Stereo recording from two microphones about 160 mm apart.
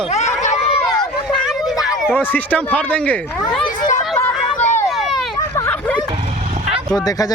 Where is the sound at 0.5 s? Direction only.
35° left (ahead or behind).